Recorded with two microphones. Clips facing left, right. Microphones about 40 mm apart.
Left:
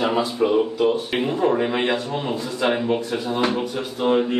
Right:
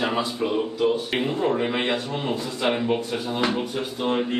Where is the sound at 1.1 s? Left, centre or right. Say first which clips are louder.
Left 3 dB; centre.